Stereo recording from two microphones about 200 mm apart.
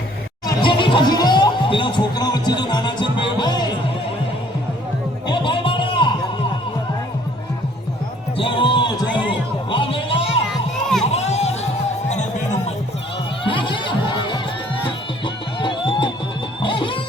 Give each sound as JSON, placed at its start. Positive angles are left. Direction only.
{"t": 0.4, "sound": "music", "side_deg": 25}
{"t": 5.3, "sound": "a sound", "side_deg": 25}
{"t": 8.4, "sound": "a sound", "side_deg": 25}
{"t": 9.6, "sound": "music", "side_deg": 25}
{"t": 10.5, "sound": "children playing", "side_deg": 0}
{"t": 11.1, "sound": "music", "side_deg": 35}
{"t": 13.4, "sound": "music", "side_deg": 25}
{"t": 15.6, "sound": "music", "side_deg": 25}